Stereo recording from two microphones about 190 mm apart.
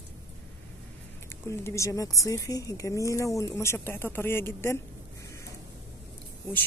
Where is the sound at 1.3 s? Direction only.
15° left (ahead or behind).